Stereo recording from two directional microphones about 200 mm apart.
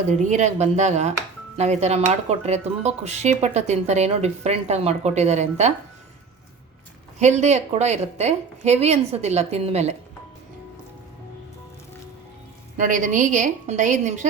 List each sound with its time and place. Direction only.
0.1 s speech: 35° right (ahead or behind)
7.2 s speech: 35° right (ahead or behind)
12.7 s speech: 40° right (ahead or behind)